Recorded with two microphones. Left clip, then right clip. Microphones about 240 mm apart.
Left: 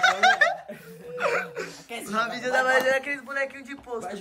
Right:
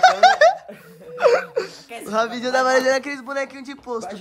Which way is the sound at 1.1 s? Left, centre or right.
Centre.